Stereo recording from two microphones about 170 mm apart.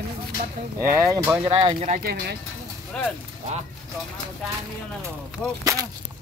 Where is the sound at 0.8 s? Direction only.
15° right (ahead or behind).